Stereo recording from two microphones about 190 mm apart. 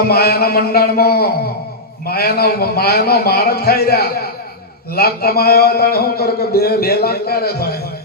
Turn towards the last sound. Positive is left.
turn(degrees=55)  # may be behind; listen again after turning